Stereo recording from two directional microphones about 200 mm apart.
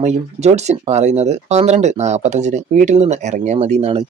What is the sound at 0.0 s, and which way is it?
Speech, 35° right (ahead or behind).